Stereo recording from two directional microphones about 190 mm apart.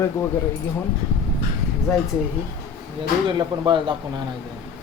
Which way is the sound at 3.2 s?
25° right (ahead or behind).